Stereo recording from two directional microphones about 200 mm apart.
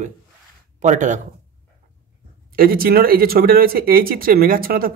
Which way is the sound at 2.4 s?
50° right (ahead or behind).